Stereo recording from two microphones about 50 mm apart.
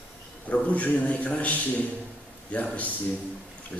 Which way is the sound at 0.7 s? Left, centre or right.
Left.